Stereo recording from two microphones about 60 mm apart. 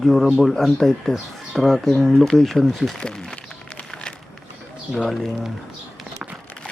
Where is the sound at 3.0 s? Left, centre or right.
Centre.